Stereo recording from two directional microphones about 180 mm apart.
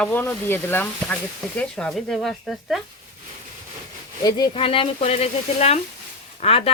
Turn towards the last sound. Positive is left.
turn(degrees=35)  # may be behind; listen again after turning